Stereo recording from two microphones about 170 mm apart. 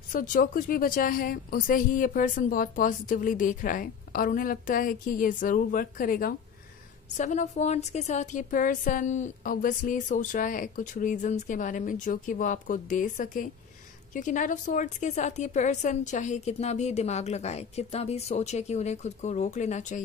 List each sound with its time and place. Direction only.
0.1 s a woman's voice: 50° left (ahead or behind)
7.2 s a woman's voice: 45° left (ahead or behind)